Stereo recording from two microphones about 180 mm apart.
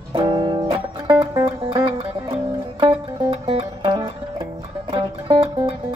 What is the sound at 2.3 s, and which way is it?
Music, 30° right (ahead or behind).